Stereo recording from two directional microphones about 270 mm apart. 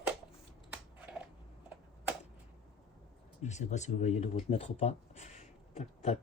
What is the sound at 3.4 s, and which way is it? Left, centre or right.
Speech, left.